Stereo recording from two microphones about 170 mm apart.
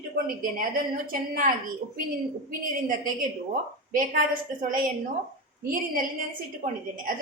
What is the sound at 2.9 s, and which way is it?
A woman's voice, 50° right (ahead or behind).